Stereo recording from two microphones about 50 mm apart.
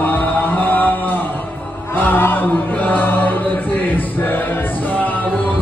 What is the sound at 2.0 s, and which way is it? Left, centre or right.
Music, left.